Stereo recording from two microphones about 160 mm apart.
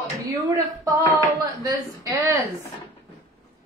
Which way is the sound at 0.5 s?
20° right (ahead or behind).